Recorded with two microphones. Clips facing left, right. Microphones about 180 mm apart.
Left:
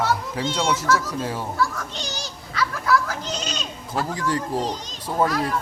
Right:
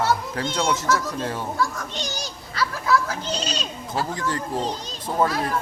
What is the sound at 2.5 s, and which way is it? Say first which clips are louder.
Children playing: even; 30° right (ahead or behind).